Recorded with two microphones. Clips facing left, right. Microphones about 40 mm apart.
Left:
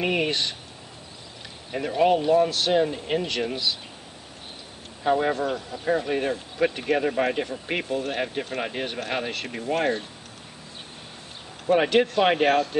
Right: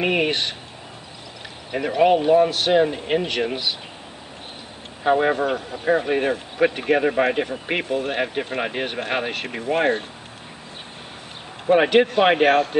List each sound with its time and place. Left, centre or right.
0.0 s speech: right
1.7 s speech: right
5.0 s speech: right
11.6 s speech: right